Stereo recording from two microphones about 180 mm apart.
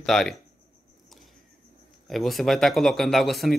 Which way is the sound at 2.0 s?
Centre (ahead or behind).